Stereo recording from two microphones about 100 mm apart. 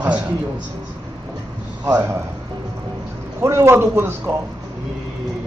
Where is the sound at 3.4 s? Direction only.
25° right (ahead or behind).